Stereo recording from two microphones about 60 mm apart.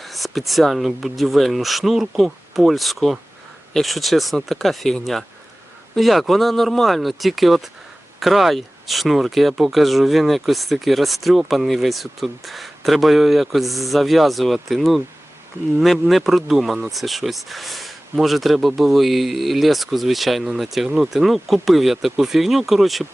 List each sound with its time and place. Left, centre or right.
0.0 s speech: centre
6.0 s speech: centre
20.8 s speech: centre
21.1 s speech: centre